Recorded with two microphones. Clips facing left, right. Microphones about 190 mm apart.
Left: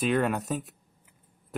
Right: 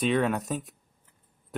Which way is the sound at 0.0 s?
Centre (ahead or behind).